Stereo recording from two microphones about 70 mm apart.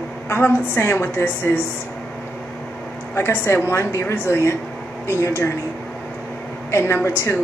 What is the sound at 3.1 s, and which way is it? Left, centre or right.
A woman's voice, left.